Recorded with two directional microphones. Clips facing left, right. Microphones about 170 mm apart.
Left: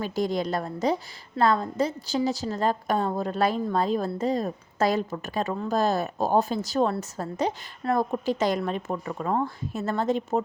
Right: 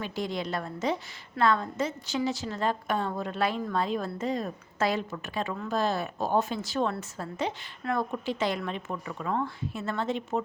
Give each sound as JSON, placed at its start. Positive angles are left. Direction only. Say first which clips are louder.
{"t": 0.0, "sound": "a woman's voice", "louder": "left 6 dB", "side_deg": 40}